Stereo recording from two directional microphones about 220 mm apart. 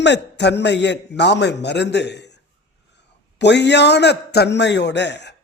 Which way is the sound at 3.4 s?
50° left (ahead or behind).